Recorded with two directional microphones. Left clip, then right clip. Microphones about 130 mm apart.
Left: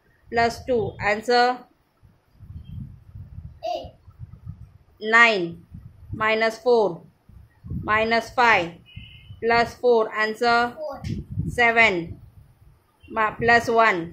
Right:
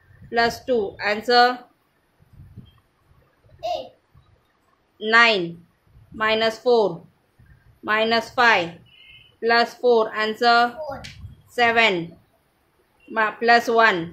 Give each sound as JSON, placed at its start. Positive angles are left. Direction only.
{"t": 0.3, "sound": "speech", "side_deg": -10}
{"t": 3.6, "sound": "a sound", "side_deg": 0}
{"t": 4.9, "sound": "a woman's voice", "side_deg": -10}
{"t": 13.1, "sound": "speech", "side_deg": -10}